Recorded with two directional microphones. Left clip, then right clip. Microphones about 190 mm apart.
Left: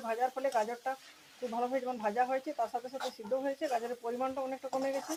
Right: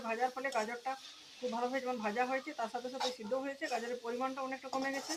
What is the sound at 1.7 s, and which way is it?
Speech, 55° left (ahead or behind).